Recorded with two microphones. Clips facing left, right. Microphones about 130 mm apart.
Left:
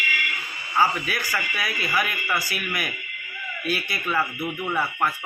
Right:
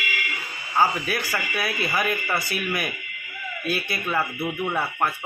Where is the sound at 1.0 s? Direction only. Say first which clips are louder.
Right 1 dB; 30° right (ahead or behind).